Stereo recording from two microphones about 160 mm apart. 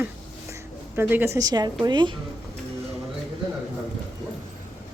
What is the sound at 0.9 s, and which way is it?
A woman's voice, 15° right (ahead or behind).